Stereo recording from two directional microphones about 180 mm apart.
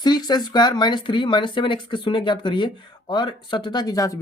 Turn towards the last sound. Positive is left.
turn(degrees=20)  # may be behind; listen again after turning